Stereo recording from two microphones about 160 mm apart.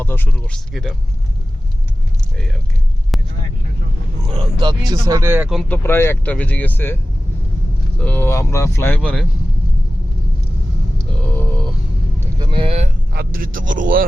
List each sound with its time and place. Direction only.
0.0 s speech: 10° left (ahead or behind)
3.1 s vehicle: centre (ahead or behind)
4.3 s speech: 25° right (ahead or behind)
5.3 s speech: 5° right (ahead or behind)
5.6 s speech: 10° left (ahead or behind)
9.0 s speech: 5° left (ahead or behind)
10.9 s a sound: 5° left (ahead or behind)
12.4 s vehicle: 30° right (ahead or behind)
13.1 s speech: 65° right (ahead or behind)